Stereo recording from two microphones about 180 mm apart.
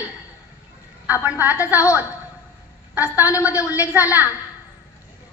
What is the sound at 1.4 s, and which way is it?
Speech, 10° right (ahead or behind).